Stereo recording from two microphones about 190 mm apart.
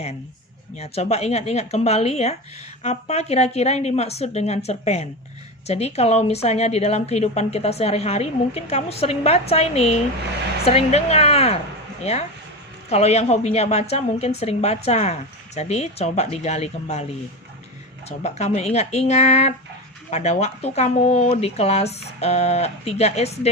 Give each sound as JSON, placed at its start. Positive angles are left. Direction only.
{"t": 0.8, "sound": "speech", "side_deg": 35}
{"t": 12.9, "sound": "speech", "side_deg": 35}
{"t": 18.2, "sound": "speech", "side_deg": 35}